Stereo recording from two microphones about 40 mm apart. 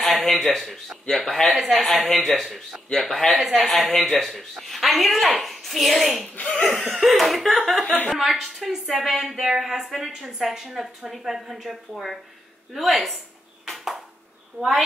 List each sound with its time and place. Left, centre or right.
0.0 s speech: centre
6.2 s speech: left
6.6 s laughter: centre
7.0 s a woman's voice: centre
14.6 s a woman's voice: right